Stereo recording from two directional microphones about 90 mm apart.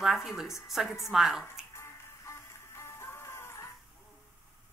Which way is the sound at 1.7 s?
30° left (ahead or behind).